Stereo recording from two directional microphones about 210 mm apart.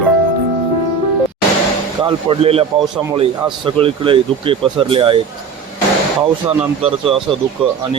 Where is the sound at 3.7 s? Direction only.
25° right (ahead or behind).